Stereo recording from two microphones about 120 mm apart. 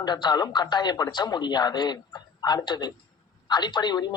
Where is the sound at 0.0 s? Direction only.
35° left (ahead or behind).